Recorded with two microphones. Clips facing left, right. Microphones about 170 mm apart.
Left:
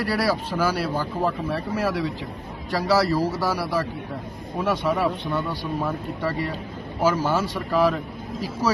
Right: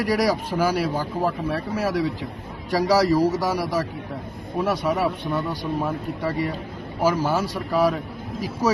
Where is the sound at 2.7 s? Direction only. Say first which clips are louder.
Right 2 dB; 15° right (ahead or behind).